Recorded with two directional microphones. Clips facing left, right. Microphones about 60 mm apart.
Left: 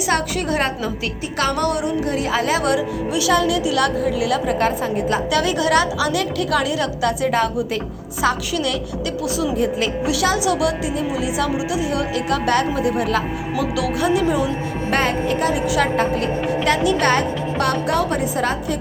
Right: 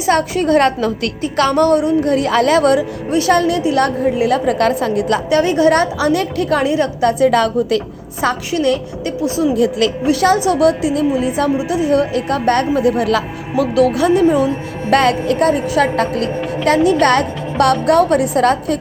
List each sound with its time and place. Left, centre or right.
0.0 s a woman's voice: right
2.0 s a woman's voice: right
5.3 s a woman's voice: right
8.4 s a woman's voice: right
9.6 s speech: right
10.1 s a woman's voice: right
13.6 s a woman's voice: right
14.8 s a woman's voice: right